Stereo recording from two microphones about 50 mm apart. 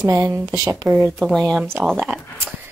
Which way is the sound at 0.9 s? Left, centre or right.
Right.